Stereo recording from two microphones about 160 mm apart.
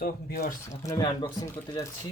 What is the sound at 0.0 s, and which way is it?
Speech, 70° left (ahead or behind).